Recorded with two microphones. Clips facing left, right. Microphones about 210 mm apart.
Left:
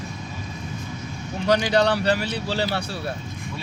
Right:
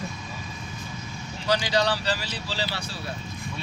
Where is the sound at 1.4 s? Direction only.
60° left (ahead or behind).